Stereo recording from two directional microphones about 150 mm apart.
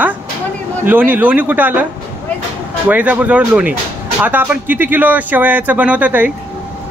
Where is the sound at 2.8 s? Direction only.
10° right (ahead or behind).